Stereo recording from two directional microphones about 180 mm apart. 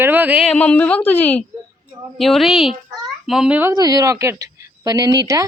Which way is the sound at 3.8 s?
20° right (ahead or behind).